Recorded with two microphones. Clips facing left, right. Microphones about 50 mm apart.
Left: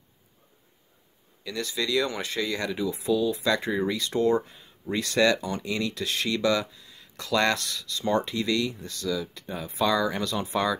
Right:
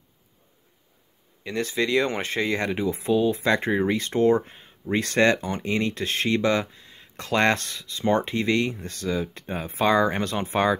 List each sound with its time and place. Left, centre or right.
1.4 s speech: right